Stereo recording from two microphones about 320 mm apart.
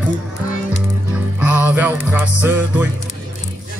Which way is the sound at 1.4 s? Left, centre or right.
Centre.